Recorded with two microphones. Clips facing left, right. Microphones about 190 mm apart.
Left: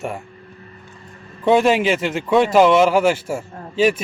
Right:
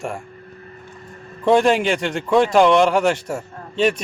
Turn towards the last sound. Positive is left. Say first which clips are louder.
# left 2 dB
turn(degrees=5)  # may be behind; listen again after turning